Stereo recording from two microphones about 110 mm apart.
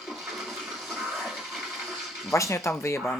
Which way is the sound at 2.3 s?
25° left (ahead or behind).